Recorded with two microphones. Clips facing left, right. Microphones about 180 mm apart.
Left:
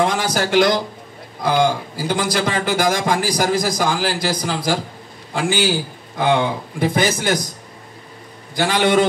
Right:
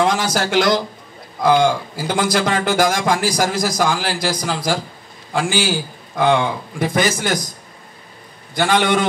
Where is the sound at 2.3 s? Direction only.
55° right (ahead or behind).